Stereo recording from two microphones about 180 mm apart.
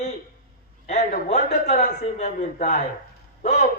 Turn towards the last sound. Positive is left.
turn(degrees=40)  # may be behind; listen again after turning